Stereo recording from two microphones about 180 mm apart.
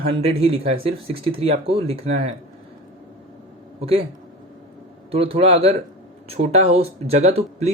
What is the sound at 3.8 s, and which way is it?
Speech, 30° right (ahead or behind).